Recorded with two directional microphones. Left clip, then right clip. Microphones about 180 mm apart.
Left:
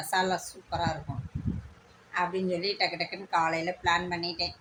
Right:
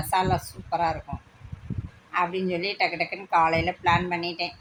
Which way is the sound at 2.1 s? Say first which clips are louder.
Right 4 dB; 10° right (ahead or behind).